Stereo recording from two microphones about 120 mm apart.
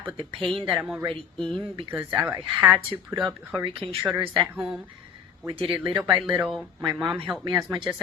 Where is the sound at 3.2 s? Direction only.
40° right (ahead or behind).